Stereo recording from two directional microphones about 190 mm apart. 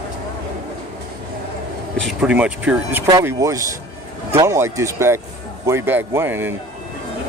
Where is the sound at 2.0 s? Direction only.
5° right (ahead or behind).